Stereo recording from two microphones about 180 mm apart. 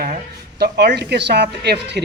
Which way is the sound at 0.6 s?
70° right (ahead or behind).